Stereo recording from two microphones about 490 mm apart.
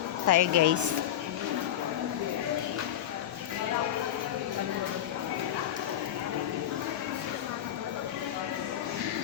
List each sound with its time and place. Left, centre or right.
0.3 s speech: right